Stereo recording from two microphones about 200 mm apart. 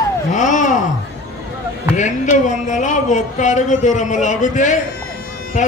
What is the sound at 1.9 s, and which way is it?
Speech, 35° left (ahead or behind).